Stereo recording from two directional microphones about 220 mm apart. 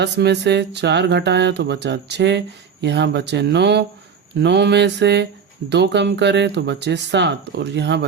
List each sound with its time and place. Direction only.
0.0 s speech: 50° right (ahead or behind)